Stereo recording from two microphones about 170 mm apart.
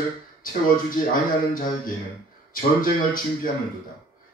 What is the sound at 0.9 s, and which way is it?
Speech, 55° left (ahead or behind).